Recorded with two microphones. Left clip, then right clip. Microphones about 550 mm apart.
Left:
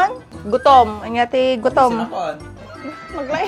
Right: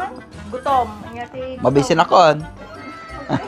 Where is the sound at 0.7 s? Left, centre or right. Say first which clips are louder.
Left 7 dB; left.